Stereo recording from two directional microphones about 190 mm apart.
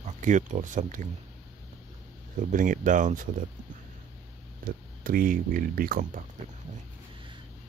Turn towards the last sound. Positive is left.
turn(degrees=-50)  # may be behind; listen again after turning